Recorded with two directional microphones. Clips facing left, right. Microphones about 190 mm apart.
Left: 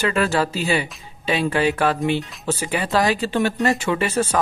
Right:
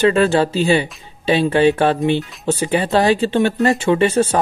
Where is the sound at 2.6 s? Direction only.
30° right (ahead or behind).